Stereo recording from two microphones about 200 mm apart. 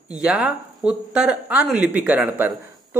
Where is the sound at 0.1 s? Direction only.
5° right (ahead or behind).